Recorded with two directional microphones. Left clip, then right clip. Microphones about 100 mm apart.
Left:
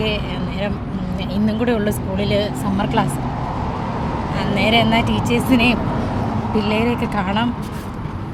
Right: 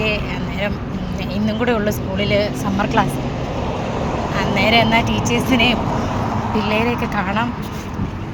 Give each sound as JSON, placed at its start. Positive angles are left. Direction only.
{"t": 1.5, "sound": "speech", "side_deg": 40}
{"t": 2.1, "sound": "speech", "side_deg": 35}
{"t": 4.4, "sound": "speech", "side_deg": 45}
{"t": 7.2, "sound": "speech", "side_deg": 75}